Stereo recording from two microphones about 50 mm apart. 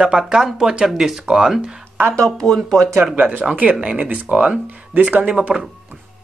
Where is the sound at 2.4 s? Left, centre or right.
Centre.